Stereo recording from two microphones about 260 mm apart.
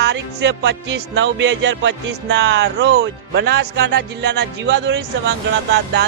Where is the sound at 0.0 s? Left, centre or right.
Right.